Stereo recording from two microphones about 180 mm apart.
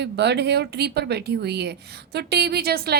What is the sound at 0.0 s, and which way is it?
A woman's voice, 70° right (ahead or behind).